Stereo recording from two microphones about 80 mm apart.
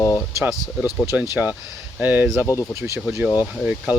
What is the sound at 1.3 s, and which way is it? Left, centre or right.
Speech, right.